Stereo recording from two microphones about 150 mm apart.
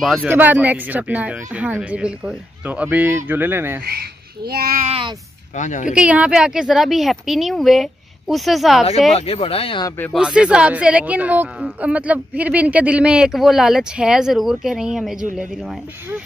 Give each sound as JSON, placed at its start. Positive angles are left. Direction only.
{"t": 0.0, "sound": "a woman's voice", "side_deg": 0}
{"t": 0.3, "sound": "speech", "side_deg": -10}
{"t": 3.8, "sound": "a child's voice", "side_deg": -90}
{"t": 4.8, "sound": "speech", "side_deg": -40}
{"t": 5.6, "sound": "speech", "side_deg": 55}
{"t": 5.9, "sound": "a woman's voice", "side_deg": -10}
{"t": 9.1, "sound": "speech", "side_deg": 40}
{"t": 9.8, "sound": "speech", "side_deg": 15}
{"t": 10.1, "sound": "a woman's voice", "side_deg": -5}